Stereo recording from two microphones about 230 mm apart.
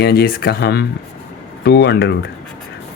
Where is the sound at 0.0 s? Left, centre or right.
Left.